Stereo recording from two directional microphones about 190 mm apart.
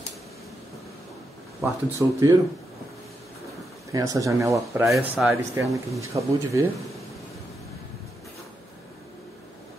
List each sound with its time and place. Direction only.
1.6 s speech: 15° right (ahead or behind)
3.9 s speech: 20° right (ahead or behind)
4.8 s speech: centre (ahead or behind)
5.4 s speech: 15° right (ahead or behind)